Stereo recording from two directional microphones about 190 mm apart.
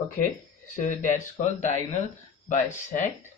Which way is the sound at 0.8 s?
45° left (ahead or behind).